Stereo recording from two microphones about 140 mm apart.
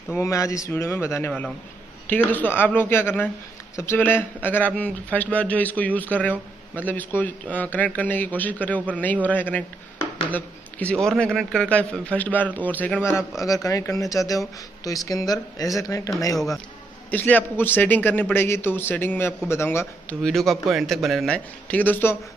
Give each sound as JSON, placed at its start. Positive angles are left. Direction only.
{"t": 0.1, "sound": "a man's voice", "side_deg": 20}
{"t": 13.5, "sound": "speech", "side_deg": 25}
{"t": 17.1, "sound": "a man's voice", "side_deg": 10}
{"t": 20.2, "sound": "speech", "side_deg": 0}
{"t": 21.6, "sound": "a man's voice", "side_deg": 10}